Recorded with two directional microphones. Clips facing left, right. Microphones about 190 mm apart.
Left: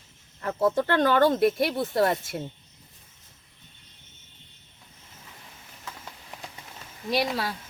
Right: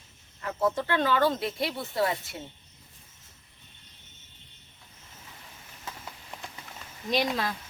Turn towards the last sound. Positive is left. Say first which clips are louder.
# left 1 dB
turn(degrees=5)  # may be behind; listen again after turning